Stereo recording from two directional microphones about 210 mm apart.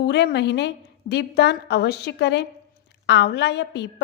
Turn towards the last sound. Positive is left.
turn(degrees=55)  # may be behind; listen again after turning